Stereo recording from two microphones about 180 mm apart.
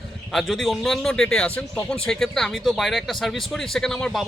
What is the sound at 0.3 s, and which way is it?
Speech, centre (ahead or behind).